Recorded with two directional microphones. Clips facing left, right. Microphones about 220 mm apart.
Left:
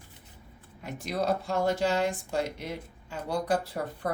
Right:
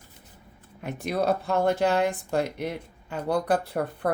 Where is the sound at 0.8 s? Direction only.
60° right (ahead or behind).